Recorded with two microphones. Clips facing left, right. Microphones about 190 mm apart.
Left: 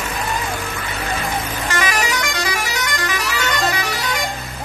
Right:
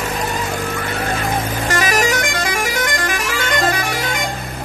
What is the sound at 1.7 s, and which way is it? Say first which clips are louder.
Vehicle horn: right 4 dB; 45° right (ahead or behind).